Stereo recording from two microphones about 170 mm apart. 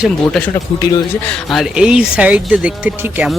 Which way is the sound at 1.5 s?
5° right (ahead or behind).